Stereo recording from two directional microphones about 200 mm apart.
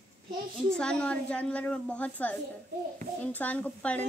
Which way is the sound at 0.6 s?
5° left (ahead or behind).